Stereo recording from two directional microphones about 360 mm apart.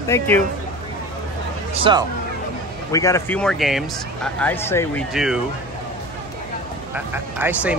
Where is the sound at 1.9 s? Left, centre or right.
Centre.